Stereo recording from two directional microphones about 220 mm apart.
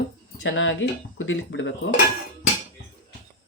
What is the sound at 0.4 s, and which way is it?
Speech, 60° left (ahead or behind).